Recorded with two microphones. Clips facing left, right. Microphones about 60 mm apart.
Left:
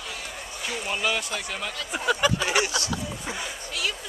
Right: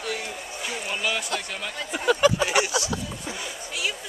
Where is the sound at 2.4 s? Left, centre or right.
Centre.